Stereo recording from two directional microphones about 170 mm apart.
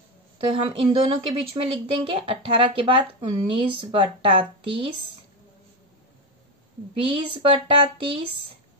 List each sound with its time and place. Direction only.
0.4 s a woman's voice: 30° right (ahead or behind)
7.1 s a woman's voice: 30° right (ahead or behind)